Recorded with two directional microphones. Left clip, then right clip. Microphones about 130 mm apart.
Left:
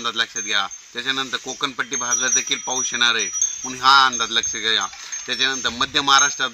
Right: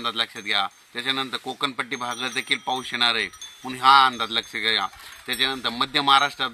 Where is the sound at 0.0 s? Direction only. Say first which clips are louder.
Left 3 dB; 5° right (ahead or behind).